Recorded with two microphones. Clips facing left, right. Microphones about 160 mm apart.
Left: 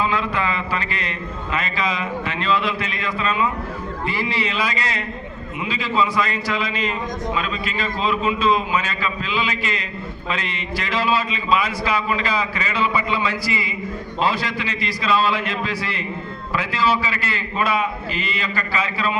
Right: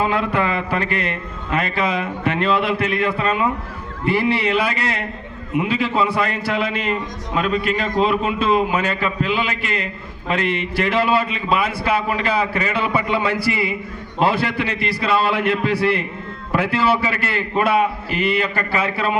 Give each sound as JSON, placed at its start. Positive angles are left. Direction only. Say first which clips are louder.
{"t": 0.0, "sound": "a man's voice", "louder": "right 3 dB", "side_deg": -55}